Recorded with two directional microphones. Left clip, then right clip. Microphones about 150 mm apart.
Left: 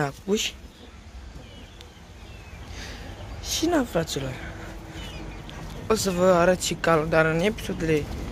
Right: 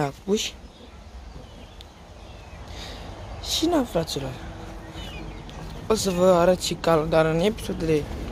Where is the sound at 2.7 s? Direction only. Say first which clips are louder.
Right 1 dB; 20° right (ahead or behind).